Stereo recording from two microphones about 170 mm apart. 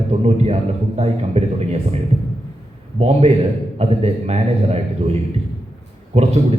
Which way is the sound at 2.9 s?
40° right (ahead or behind).